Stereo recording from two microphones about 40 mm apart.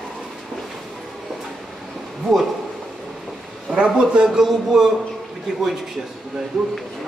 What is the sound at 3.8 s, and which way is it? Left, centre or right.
Speech, right.